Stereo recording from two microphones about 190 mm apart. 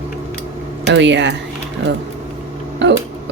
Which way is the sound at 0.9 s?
70° right (ahead or behind).